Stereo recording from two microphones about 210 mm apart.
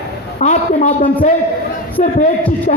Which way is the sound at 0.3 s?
35° left (ahead or behind).